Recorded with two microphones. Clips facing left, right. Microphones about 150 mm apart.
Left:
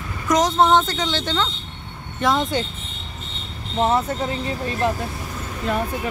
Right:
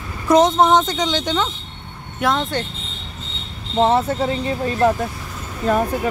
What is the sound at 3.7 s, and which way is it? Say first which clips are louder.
Speech: right 4 dB; 30° right (ahead or behind).